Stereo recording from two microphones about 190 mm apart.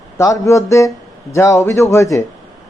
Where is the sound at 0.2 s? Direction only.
15° left (ahead or behind).